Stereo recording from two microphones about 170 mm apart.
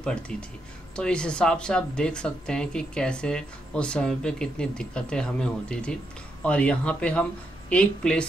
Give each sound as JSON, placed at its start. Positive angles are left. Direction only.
{"t": 0.0, "sound": "speech", "side_deg": 5}